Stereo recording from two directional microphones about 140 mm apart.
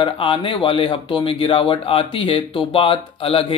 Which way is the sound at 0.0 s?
40° left (ahead or behind).